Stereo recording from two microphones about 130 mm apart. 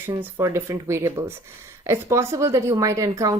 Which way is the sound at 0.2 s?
20° right (ahead or behind).